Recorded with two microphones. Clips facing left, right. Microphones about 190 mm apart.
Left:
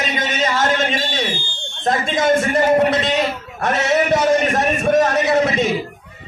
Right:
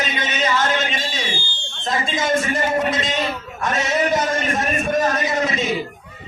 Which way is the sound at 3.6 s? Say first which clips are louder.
Left 3 dB; 70° left (ahead or behind).